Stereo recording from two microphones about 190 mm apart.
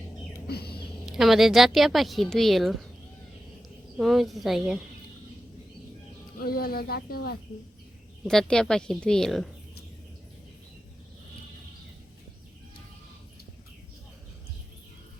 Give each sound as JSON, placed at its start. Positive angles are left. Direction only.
{"t": 0.4, "sound": "a sound", "side_deg": 55}
{"t": 1.0, "sound": "a woman's voice", "side_deg": 0}
{"t": 3.9, "sound": "a woman's voice", "side_deg": 0}
{"t": 6.4, "sound": "speech", "side_deg": 55}
{"t": 8.2, "sound": "a woman's voice", "side_deg": 0}